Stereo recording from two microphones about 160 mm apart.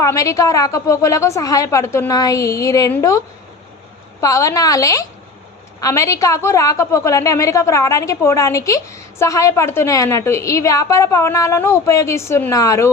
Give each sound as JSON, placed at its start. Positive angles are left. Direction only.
{"t": 0.0, "sound": "a woman's voice", "side_deg": 20}
{"t": 4.2, "sound": "a woman's voice", "side_deg": 20}